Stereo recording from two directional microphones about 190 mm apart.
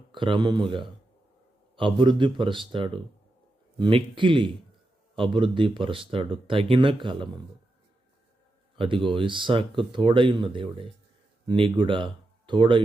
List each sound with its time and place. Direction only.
0.1 s speech: 25° right (ahead or behind)
8.8 s speech: 25° right (ahead or behind)